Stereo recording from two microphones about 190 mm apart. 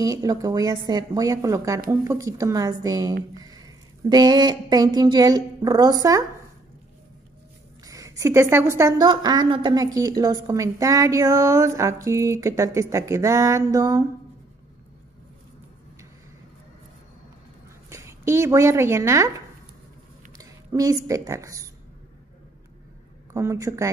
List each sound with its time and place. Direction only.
0.0 s a woman's voice: 15° right (ahead or behind)
7.8 s a woman's voice: 20° right (ahead or behind)
17.8 s speech: 15° right (ahead or behind)
20.3 s speech: 20° right (ahead or behind)
23.3 s a woman's voice: 15° right (ahead or behind)